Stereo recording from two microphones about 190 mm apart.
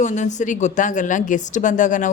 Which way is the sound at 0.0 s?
40° left (ahead or behind).